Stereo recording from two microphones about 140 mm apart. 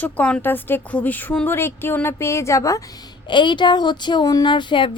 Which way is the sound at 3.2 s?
35° left (ahead or behind).